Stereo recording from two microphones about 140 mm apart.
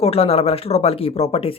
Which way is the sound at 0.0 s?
45° left (ahead or behind).